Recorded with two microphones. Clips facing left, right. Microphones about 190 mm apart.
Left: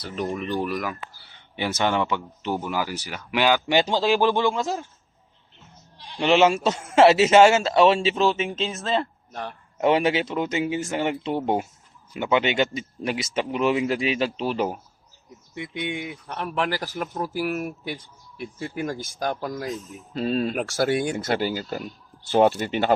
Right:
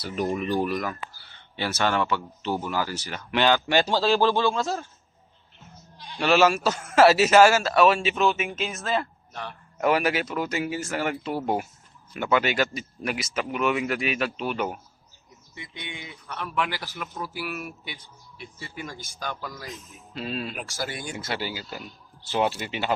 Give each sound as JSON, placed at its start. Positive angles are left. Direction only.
{"t": 0.0, "sound": "speech", "side_deg": -5}
{"t": 1.2, "sound": "speech", "side_deg": 15}
{"t": 6.1, "sound": "a man's voice", "side_deg": 20}
{"t": 9.3, "sound": "a man's voice", "side_deg": 45}
{"t": 9.7, "sound": "a man's voice", "side_deg": 25}
{"t": 15.5, "sound": "speech", "side_deg": 60}
{"t": 21.2, "sound": "speech", "side_deg": 50}